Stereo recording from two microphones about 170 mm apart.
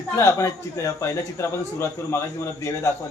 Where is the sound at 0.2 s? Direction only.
15° left (ahead or behind).